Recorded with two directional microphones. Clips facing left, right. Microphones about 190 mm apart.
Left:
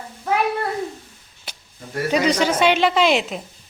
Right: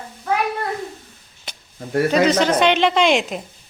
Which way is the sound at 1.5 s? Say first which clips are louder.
Right 1 dB; 10° left (ahead or behind).